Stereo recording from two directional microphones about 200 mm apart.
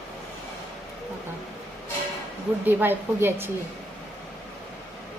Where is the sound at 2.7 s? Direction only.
10° right (ahead or behind).